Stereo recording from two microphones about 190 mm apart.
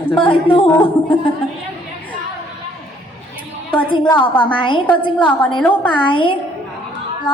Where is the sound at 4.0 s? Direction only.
25° left (ahead or behind).